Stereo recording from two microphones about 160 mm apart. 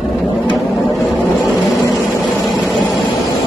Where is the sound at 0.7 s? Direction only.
Centre (ahead or behind).